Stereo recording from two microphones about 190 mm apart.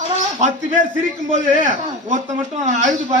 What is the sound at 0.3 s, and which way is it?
A man's voice, 40° right (ahead or behind).